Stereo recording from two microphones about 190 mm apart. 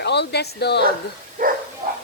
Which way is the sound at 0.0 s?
65° left (ahead or behind).